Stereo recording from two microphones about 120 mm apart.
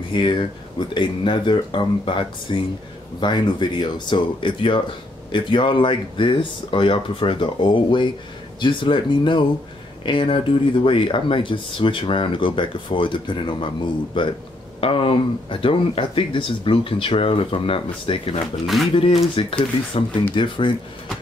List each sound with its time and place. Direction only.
0.1 s speech: 40° left (ahead or behind)